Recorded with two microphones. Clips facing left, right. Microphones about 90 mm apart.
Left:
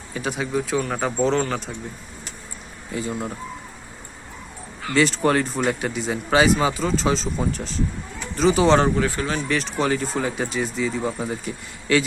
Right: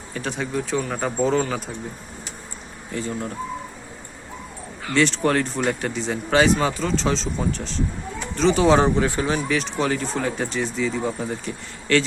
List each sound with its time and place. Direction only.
0.1 s speech: 5° left (ahead or behind)
2.9 s speech: 10° left (ahead or behind)
4.9 s speech: centre (ahead or behind)
8.8 s speech: 20° right (ahead or behind)
9.5 s speech: centre (ahead or behind)